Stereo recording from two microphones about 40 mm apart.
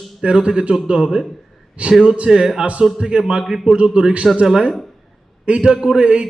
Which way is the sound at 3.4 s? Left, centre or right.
Centre.